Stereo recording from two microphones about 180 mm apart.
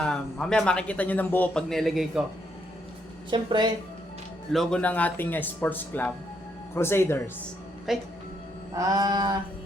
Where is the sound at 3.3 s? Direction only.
25° right (ahead or behind).